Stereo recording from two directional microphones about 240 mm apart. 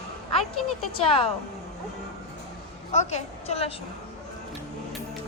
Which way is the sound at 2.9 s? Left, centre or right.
Left.